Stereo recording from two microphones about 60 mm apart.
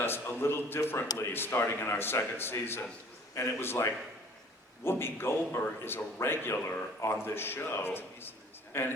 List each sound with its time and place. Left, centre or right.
0.0 s a man's voice: left